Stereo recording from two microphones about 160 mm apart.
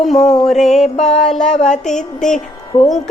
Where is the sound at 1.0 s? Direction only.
45° left (ahead or behind).